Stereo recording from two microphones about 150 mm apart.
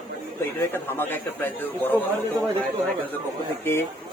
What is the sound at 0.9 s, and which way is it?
A man's voice, 15° left (ahead or behind).